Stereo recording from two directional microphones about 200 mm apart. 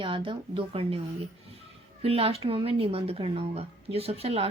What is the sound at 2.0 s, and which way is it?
Speech, 30° right (ahead or behind).